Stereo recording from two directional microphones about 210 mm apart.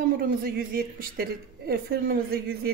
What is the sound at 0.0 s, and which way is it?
A woman's voice, 45° right (ahead or behind).